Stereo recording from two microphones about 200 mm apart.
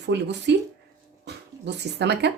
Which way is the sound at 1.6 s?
60° right (ahead or behind).